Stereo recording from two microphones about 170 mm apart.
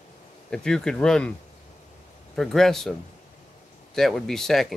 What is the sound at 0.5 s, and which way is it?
Speech, 5° left (ahead or behind).